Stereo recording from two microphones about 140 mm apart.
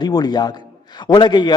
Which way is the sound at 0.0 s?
30° left (ahead or behind).